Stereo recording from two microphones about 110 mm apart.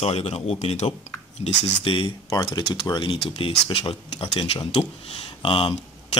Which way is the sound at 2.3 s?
40° left (ahead or behind).